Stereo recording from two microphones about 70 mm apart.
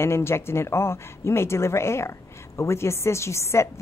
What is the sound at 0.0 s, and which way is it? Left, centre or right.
A woman's voice, left.